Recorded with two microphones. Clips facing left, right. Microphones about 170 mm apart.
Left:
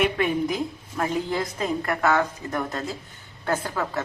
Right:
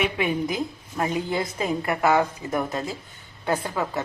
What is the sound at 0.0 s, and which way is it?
A woman's voice, centre (ahead or behind).